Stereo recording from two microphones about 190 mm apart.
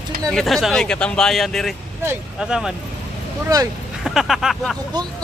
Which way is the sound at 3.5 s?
20° right (ahead or behind).